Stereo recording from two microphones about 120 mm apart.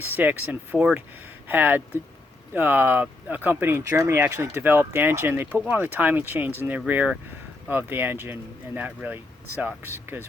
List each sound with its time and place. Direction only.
0.1 s speech: 15° right (ahead or behind)